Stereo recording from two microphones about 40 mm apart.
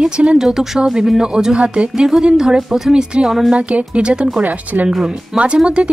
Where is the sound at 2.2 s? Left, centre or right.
Centre.